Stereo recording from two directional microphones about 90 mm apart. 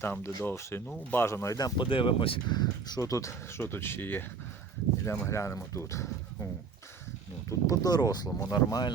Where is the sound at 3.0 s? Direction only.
35° left (ahead or behind).